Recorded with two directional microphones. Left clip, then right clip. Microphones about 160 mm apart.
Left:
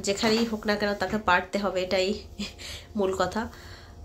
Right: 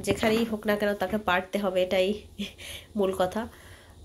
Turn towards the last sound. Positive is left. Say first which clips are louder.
# even
turn(degrees=-15)  # may be behind; listen again after turning